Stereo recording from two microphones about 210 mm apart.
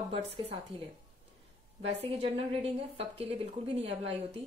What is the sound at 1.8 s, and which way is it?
A woman's voice, 30° right (ahead or behind).